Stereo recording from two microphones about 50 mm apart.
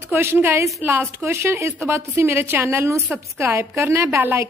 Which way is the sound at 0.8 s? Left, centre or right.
Right.